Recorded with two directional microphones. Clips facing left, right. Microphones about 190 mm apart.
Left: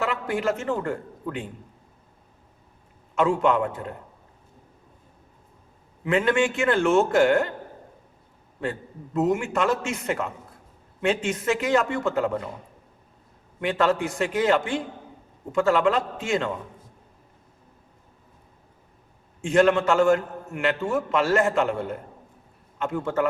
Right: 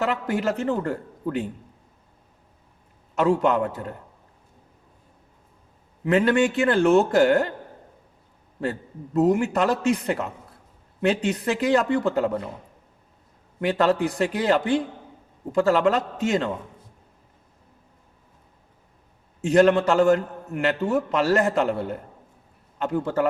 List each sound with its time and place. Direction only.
0.0 s a man's voice: 40° right (ahead or behind)
3.2 s a man's voice: 40° right (ahead or behind)
6.1 s a man's voice: 40° right (ahead or behind)
9.1 s a man's voice: 40° right (ahead or behind)
13.6 s a man's voice: 40° right (ahead or behind)
19.4 s a man's voice: 40° right (ahead or behind)